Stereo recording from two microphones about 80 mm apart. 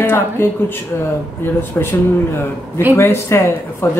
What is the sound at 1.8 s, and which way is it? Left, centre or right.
Speech, left.